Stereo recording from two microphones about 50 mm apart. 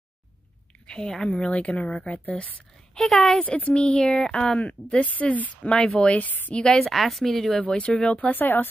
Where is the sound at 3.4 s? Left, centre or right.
Left.